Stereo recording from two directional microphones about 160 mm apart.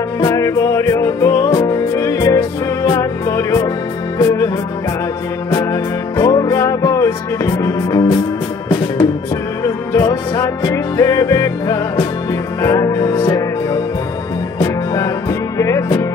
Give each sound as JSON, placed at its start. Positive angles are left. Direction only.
{"t": 0.2, "sound": "music", "side_deg": 20}
{"t": 5.5, "sound": "music", "side_deg": 20}
{"t": 9.6, "sound": "music", "side_deg": 20}
{"t": 14.6, "sound": "music", "side_deg": 20}